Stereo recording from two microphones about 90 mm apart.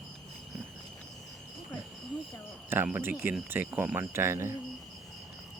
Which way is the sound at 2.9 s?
25° right (ahead or behind).